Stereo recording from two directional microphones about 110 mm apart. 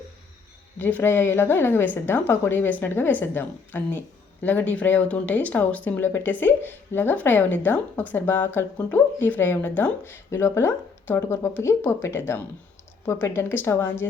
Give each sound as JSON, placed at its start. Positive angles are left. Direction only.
{"t": 0.8, "sound": "a woman's voice", "side_deg": 15}